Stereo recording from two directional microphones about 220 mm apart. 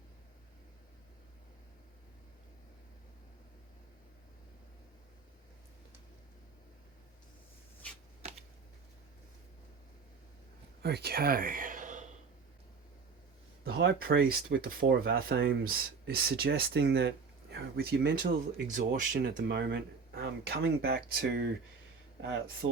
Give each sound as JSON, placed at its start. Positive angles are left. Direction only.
{"t": 8.2, "sound": "typing", "side_deg": -30}
{"t": 10.8, "sound": "speech", "side_deg": -45}
{"t": 13.7, "sound": "speech", "side_deg": -45}
{"t": 19.4, "sound": "speech", "side_deg": -55}
{"t": 22.6, "sound": "speech", "side_deg": -30}